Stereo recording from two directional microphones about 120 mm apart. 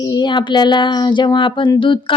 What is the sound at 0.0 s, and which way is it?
Speech, 35° left (ahead or behind).